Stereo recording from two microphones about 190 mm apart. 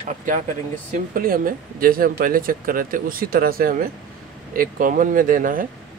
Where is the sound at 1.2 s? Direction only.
50° right (ahead or behind).